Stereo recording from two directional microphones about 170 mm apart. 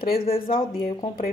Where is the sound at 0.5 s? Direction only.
35° left (ahead or behind).